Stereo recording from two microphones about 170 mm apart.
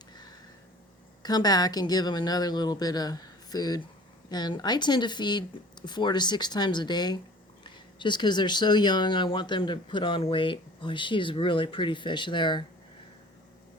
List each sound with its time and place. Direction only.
1.2 s speech: 25° left (ahead or behind)